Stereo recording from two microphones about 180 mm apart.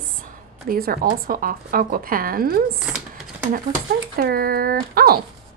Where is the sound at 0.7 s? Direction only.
55° right (ahead or behind).